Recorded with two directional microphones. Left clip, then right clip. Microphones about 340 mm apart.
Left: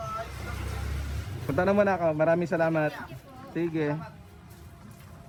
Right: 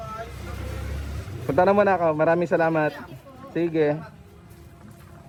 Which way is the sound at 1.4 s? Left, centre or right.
Centre.